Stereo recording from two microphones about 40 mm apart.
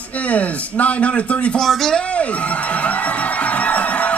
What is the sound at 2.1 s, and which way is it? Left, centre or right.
Music, left.